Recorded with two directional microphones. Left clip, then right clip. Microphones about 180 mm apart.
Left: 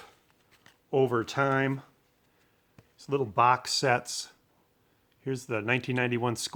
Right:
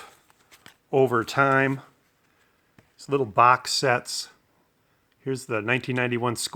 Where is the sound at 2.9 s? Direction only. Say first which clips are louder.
Right 5 dB; 30° right (ahead or behind).